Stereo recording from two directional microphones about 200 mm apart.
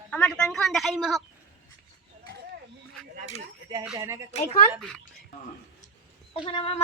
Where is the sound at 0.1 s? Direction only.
5° left (ahead or behind).